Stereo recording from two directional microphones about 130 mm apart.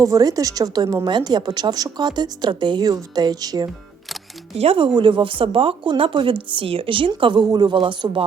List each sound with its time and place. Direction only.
0.0 s a woman's voice: 25° right (ahead or behind)
4.5 s speech: 50° right (ahead or behind)